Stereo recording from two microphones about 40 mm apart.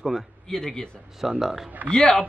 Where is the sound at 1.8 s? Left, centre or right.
Left.